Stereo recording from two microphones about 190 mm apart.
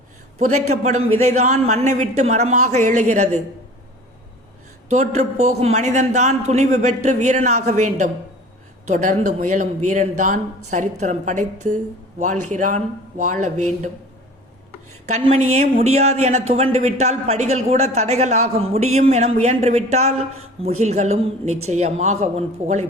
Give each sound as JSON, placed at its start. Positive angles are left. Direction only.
{"t": 0.3, "sound": "a man's voice", "side_deg": -35}
{"t": 4.9, "sound": "a man's voice", "side_deg": -35}
{"t": 15.0, "sound": "a man's voice", "side_deg": -35}